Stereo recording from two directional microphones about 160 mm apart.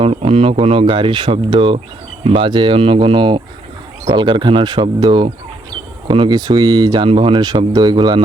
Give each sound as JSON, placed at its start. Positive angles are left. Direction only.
{"t": 0.0, "sound": "speech", "side_deg": -35}